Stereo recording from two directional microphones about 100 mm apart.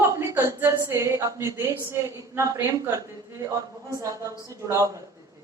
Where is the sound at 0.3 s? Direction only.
25° right (ahead or behind).